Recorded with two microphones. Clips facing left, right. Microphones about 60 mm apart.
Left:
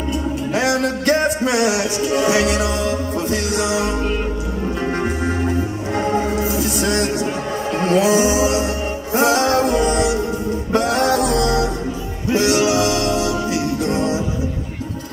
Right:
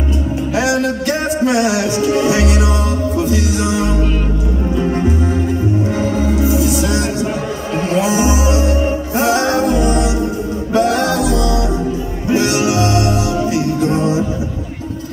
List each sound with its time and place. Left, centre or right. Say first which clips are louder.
0.6 s a sound: right 3 dB; left
2.0 s music: right 3 dB; right
3.2 s music: right 3 dB; left
5.9 s music: right 2 dB; left
8.2 s music: right 1 dB; right
10.7 s music: right 2 dB; left
12.3 s music: right 1 dB; right